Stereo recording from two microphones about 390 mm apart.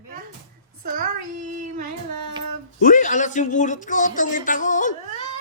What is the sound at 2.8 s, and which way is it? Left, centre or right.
Speech, centre.